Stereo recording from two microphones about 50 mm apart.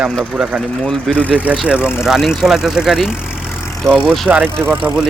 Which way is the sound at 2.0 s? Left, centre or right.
Centre.